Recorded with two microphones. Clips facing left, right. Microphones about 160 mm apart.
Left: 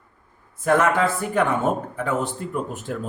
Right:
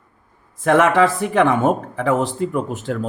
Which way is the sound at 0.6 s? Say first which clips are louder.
Right 5 dB; 90° right.